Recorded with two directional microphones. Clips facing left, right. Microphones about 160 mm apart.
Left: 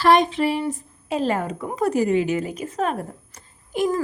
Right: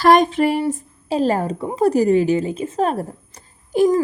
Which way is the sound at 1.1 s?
35° right (ahead or behind).